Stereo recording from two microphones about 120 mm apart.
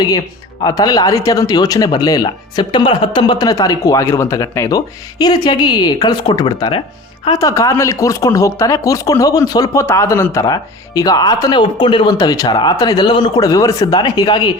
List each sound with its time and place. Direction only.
0.6 s speech: 30° left (ahead or behind)
7.3 s speech: 30° left (ahead or behind)
13.4 s speech: 30° left (ahead or behind)